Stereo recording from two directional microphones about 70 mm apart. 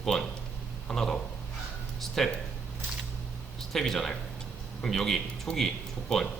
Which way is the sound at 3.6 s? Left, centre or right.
Centre.